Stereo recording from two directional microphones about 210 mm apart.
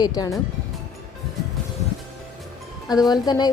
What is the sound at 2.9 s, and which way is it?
Speech, 20° left (ahead or behind).